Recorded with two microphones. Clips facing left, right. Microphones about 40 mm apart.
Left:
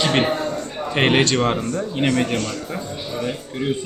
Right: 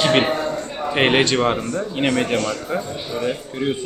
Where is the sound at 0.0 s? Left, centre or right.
Centre.